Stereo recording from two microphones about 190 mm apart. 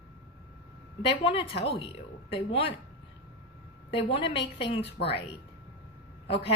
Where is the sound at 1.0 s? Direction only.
30° left (ahead or behind).